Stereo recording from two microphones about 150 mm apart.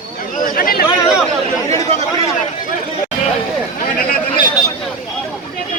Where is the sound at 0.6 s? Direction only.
75° left (ahead or behind).